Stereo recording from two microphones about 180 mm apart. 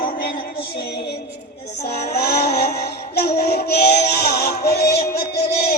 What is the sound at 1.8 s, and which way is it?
Child singing, 65° left (ahead or behind).